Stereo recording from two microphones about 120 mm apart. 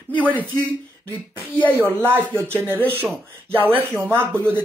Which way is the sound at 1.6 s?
15° left (ahead or behind).